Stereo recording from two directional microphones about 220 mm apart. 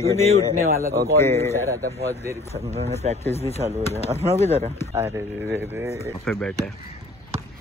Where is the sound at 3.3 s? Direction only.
30° left (ahead or behind).